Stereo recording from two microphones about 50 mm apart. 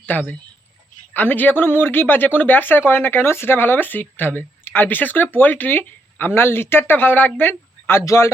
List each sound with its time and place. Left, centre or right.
0.0 s speech: left
8.0 s speech: left